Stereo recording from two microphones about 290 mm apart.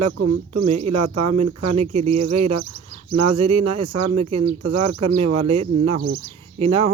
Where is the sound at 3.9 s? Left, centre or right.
Right.